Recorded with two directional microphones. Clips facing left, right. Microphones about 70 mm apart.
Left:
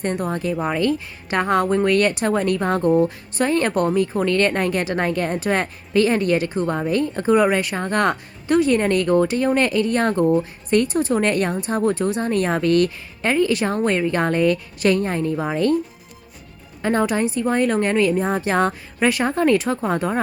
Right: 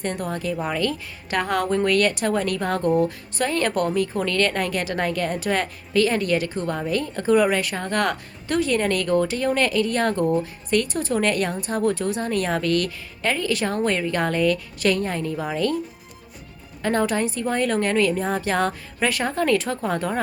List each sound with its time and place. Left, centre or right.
0.0 s speech: left
16.8 s speech: centre